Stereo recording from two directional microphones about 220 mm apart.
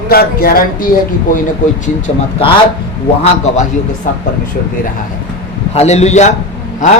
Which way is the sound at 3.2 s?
30° left (ahead or behind).